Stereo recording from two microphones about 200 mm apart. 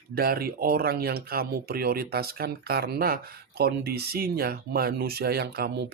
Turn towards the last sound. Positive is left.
turn(degrees=-50)  # may be behind; listen again after turning